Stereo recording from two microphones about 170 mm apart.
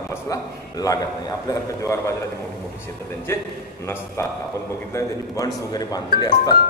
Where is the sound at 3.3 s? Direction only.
15° left (ahead or behind).